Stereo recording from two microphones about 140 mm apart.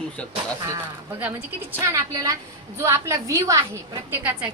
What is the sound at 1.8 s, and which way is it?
A woman's voice, 20° right (ahead or behind).